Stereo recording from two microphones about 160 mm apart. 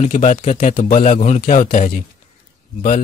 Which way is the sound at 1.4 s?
60° left (ahead or behind).